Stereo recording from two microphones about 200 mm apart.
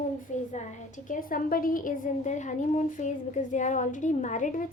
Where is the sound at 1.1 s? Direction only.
45° left (ahead or behind).